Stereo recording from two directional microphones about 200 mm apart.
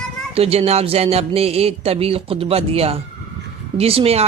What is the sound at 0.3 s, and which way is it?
Speech, 30° right (ahead or behind).